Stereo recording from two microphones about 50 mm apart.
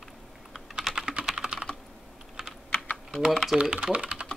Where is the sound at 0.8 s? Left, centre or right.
Centre.